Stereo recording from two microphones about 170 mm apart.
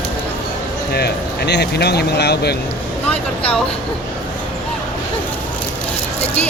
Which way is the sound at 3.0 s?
5° left (ahead or behind).